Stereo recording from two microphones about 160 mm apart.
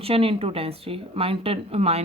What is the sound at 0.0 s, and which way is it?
A woman's voice, 35° right (ahead or behind).